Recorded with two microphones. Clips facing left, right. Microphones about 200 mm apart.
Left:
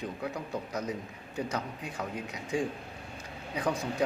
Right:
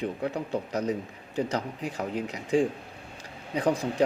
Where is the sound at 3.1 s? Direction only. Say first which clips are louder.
Right 6 dB; 30° right (ahead or behind).